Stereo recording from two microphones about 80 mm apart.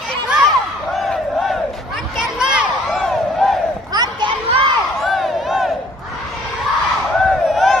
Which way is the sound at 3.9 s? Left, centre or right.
Right.